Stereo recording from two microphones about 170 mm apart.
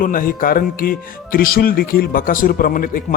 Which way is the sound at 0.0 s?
55° left (ahead or behind).